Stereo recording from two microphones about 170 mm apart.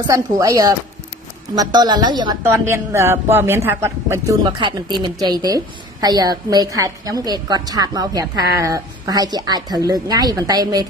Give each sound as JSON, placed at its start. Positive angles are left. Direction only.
{"t": 0.0, "sound": "a woman's voice", "side_deg": -20}
{"t": 4.5, "sound": "a woman's voice", "side_deg": -30}